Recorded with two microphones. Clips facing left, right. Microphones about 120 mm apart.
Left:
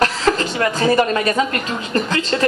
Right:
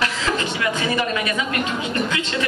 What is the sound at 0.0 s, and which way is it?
A woman's voice, 45° left (ahead or behind).